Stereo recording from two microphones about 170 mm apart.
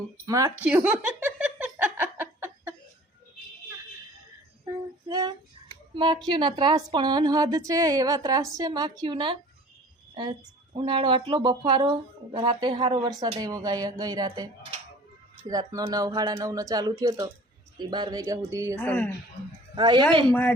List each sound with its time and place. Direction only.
0.3 s speech: 20° right (ahead or behind)
0.6 s giggle: 10° right (ahead or behind)
4.6 s female singing: 20° right (ahead or behind)
5.6 s a sound: 25° right (ahead or behind)
5.9 s speech: 30° right (ahead or behind)
10.8 s speech: 30° right (ahead or behind)
18.8 s speech: 10° left (ahead or behind)
19.7 s speech: 25° right (ahead or behind)